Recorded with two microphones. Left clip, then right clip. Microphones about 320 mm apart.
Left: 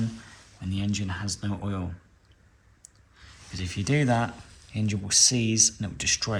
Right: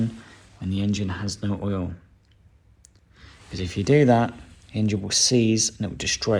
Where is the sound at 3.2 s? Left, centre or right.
Centre.